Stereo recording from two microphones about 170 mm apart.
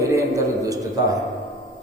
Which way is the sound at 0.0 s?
20° right (ahead or behind).